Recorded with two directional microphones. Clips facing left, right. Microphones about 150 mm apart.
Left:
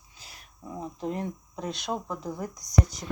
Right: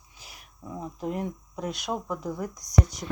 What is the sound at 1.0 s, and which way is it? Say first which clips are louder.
Speech: right 1 dB; 5° right (ahead or behind).